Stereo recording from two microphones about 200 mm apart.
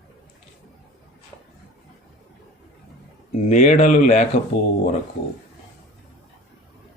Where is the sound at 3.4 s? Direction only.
35° left (ahead or behind).